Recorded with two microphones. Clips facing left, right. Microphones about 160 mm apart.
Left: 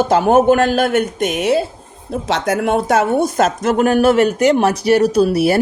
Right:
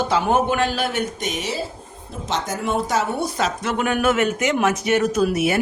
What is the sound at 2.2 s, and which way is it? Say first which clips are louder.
Speech: left 7 dB; 70° left (ahead or behind).